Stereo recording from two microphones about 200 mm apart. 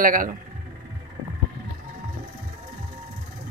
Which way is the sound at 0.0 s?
45° right (ahead or behind).